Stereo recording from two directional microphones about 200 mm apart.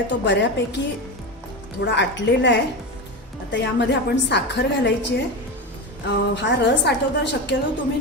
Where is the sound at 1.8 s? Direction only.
60° left (ahead or behind).